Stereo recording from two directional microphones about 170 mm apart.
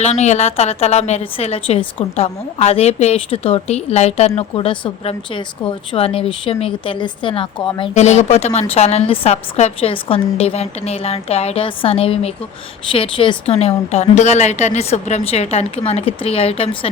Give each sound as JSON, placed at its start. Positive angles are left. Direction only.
{"t": 0.0, "sound": "a woman's voice", "side_deg": 40}
{"t": 7.8, "sound": "a woman's voice", "side_deg": 40}